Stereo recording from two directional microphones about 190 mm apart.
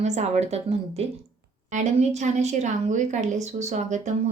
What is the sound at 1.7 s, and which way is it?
A woman's voice, 40° right (ahead or behind).